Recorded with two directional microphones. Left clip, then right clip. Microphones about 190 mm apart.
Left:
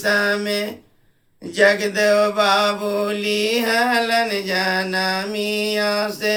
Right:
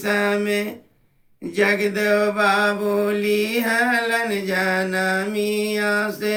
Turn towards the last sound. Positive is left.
turn(degrees=15)  # may be behind; listen again after turning